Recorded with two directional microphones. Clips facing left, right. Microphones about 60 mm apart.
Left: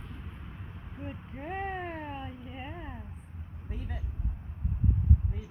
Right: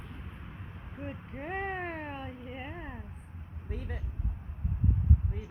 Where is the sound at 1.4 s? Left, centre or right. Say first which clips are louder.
Even; right.